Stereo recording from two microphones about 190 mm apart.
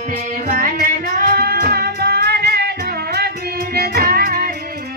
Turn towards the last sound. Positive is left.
turn(degrees=-50)  # may be behind; listen again after turning